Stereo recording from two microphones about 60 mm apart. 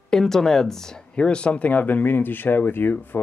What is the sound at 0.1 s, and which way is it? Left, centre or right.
Speech, centre.